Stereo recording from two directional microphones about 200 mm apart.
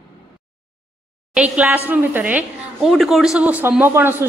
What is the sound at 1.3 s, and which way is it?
A woman's voice, 5° right (ahead or behind).